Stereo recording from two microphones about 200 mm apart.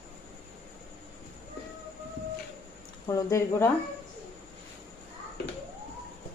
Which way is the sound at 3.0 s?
15° left (ahead or behind).